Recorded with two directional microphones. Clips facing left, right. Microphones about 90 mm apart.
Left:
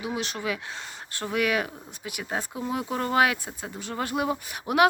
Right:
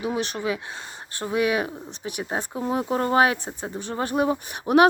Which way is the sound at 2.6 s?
35° right (ahead or behind).